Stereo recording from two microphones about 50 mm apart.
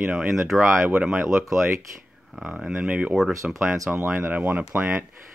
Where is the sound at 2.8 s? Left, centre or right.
Right.